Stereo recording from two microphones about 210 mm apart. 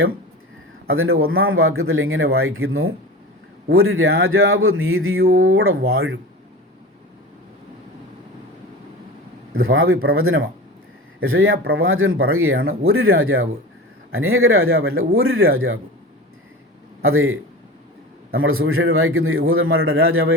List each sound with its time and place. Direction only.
0.9 s a man's voice: 80° right
5.4 s speech: 70° right (ahead or behind)
9.6 s speech: 75° right (ahead or behind)
17.0 s speech: 75° right (ahead or behind)
18.4 s a man's voice: 80° right